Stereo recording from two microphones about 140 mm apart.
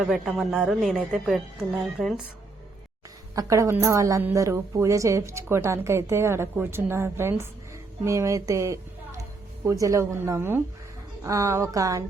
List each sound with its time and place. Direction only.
0.0 s speech: 5° right (ahead or behind)
3.3 s a woman's voice: 20° right (ahead or behind)